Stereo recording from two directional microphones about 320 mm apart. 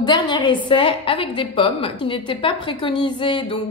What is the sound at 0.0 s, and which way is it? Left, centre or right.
A woman's voice, centre.